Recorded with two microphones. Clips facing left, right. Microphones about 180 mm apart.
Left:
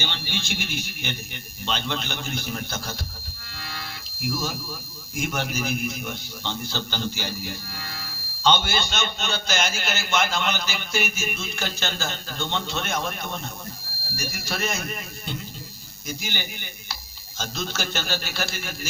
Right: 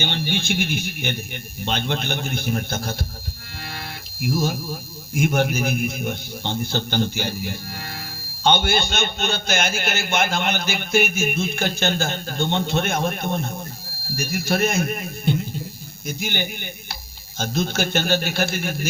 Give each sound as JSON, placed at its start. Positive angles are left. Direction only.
{"t": 0.0, "sound": "speech", "side_deg": -55}
{"t": 3.6, "sound": "music", "side_deg": -55}
{"t": 4.3, "sound": "a man's voice", "side_deg": -55}